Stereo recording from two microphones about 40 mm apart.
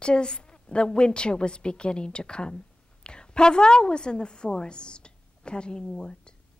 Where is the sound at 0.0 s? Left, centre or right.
Left.